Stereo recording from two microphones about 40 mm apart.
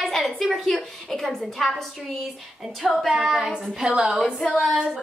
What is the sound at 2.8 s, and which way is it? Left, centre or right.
Speech, centre.